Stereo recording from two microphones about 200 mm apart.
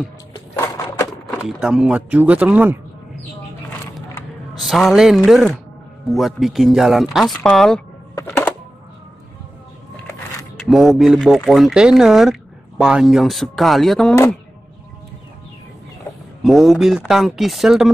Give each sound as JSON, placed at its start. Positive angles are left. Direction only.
{"t": 0.6, "sound": "a sound", "side_deg": 15}
{"t": 1.4, "sound": "speech", "side_deg": -5}
{"t": 4.6, "sound": "speech", "side_deg": 0}
{"t": 8.1, "sound": "typewriter", "side_deg": 15}
{"t": 10.6, "sound": "speech", "side_deg": 0}
{"t": 16.4, "sound": "speech", "side_deg": 0}